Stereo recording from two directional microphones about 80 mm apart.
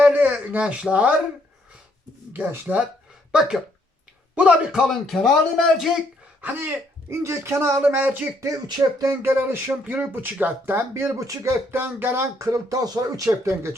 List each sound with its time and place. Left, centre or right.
0.0 s a sound: right
0.6 s speech: centre
2.3 s speech: right
3.3 s a man's voice: centre
6.4 s speech: right
7.9 s speech: right
12.4 s speech: right